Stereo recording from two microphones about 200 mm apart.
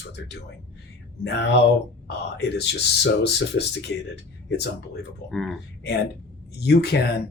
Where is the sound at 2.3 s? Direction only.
60° left (ahead or behind).